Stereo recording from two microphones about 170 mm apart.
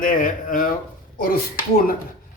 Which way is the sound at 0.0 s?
50° left (ahead or behind).